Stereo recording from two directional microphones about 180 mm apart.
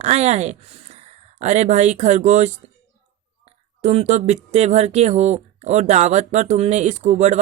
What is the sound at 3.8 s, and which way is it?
Speech, 40° right (ahead or behind).